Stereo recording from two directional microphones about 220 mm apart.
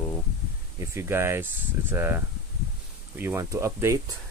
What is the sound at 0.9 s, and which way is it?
Speech, 10° right (ahead or behind).